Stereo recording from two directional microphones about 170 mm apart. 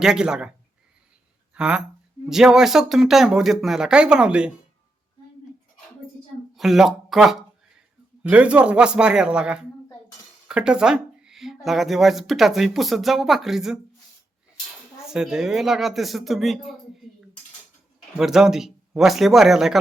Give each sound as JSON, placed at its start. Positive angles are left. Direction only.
{"t": 0.0, "sound": "speech", "side_deg": -5}
{"t": 1.5, "sound": "speech", "side_deg": -5}
{"t": 6.6, "sound": "speech", "side_deg": 0}
{"t": 15.0, "sound": "speech", "side_deg": -5}
{"t": 18.2, "sound": "speech", "side_deg": -5}